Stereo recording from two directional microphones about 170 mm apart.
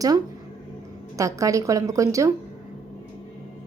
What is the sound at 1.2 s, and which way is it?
Speech, 20° right (ahead or behind).